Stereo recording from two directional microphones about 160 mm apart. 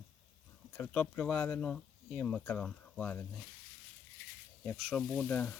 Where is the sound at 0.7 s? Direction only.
10° left (ahead or behind).